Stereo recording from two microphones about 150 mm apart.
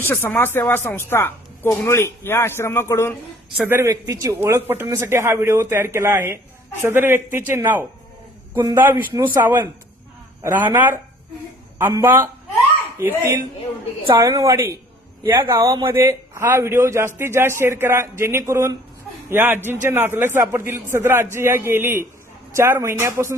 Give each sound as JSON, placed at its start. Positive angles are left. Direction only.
{"t": 0.0, "sound": "speech", "side_deg": 15}
{"t": 3.6, "sound": "speech", "side_deg": -15}
{"t": 14.2, "sound": "speech", "side_deg": -20}
{"t": 16.0, "sound": "speech", "side_deg": -15}